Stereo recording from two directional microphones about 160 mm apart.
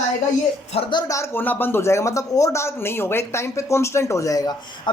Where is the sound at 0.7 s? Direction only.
35° left (ahead or behind).